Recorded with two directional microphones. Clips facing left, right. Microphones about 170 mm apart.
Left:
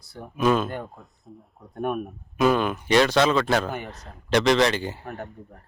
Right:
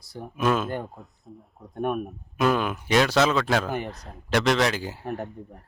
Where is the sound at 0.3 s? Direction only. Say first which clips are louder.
Left 2 dB; 5° right (ahead or behind).